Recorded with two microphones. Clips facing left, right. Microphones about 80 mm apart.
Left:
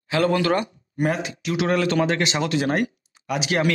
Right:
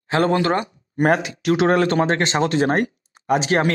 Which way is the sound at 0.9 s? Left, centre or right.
Right.